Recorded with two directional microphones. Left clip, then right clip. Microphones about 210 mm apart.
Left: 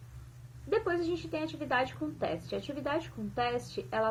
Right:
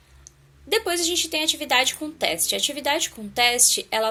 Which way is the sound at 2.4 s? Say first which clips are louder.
Right 13 dB; 60° right (ahead or behind).